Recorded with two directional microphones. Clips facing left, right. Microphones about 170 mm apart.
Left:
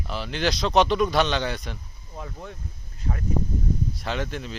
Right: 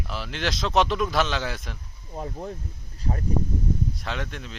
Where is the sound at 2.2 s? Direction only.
35° right (ahead or behind).